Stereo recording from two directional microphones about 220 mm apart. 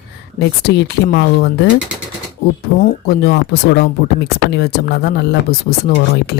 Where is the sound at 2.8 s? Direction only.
45° left (ahead or behind).